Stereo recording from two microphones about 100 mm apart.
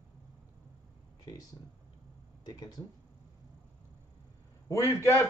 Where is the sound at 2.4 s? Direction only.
40° left (ahead or behind).